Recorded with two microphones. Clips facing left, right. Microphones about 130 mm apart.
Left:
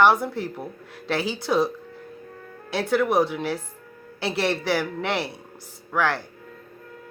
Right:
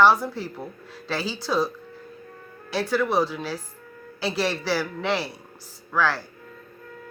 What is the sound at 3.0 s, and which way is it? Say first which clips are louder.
Speech: left 3 dB; 20° left (ahead or behind).